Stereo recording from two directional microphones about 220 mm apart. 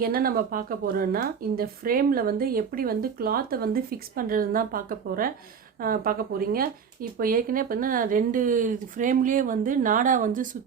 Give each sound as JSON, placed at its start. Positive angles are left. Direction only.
{"t": 0.0, "sound": "speech", "side_deg": -40}